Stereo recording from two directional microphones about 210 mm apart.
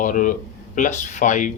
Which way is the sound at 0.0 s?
40° left (ahead or behind).